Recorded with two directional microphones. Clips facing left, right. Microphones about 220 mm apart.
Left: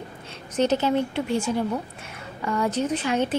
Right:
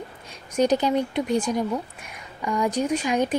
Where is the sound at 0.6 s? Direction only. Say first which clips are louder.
Right 1 dB; 15° right (ahead or behind).